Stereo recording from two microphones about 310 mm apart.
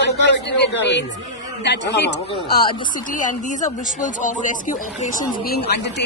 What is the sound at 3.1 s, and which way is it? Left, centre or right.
Speech, left.